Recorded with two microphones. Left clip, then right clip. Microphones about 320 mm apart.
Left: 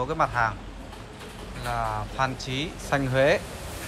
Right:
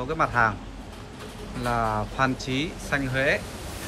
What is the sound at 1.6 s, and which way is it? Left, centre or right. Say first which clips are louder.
Speech: right 3 dB; centre.